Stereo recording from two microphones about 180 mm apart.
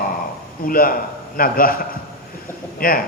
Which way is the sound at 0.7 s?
50° left (ahead or behind).